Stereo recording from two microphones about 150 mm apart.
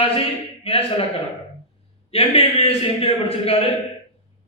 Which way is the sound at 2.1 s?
40° left (ahead or behind).